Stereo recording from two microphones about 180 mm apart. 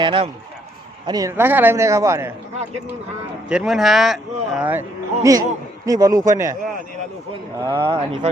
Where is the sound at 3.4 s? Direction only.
5° right (ahead or behind).